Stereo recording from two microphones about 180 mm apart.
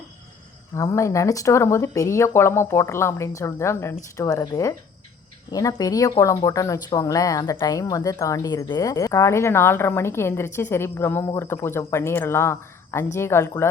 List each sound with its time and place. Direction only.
0.8 s speech: 15° left (ahead or behind)